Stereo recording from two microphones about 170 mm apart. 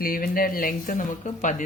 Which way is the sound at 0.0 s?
60° left (ahead or behind).